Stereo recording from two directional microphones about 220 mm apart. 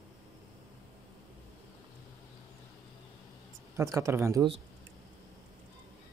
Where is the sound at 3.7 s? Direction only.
15° right (ahead or behind).